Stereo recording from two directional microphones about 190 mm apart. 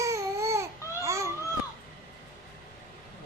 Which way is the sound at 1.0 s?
15° right (ahead or behind).